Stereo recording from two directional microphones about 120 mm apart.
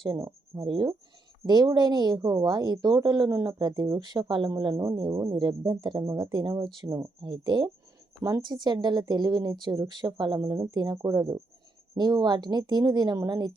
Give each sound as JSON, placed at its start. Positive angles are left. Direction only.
{"t": 0.2, "sound": "speech", "side_deg": -25}
{"t": 0.6, "sound": "speech", "side_deg": -45}
{"t": 5.4, "sound": "speech", "side_deg": -35}
{"t": 7.2, "sound": "speech", "side_deg": -40}
{"t": 10.4, "sound": "speech", "side_deg": -25}